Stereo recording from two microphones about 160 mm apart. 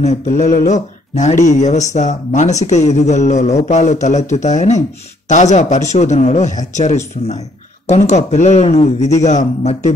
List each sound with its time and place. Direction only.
0.0 s speech: 45° left (ahead or behind)